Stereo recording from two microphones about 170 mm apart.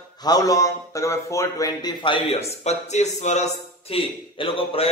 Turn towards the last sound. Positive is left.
turn(degrees=35)  # may be behind; listen again after turning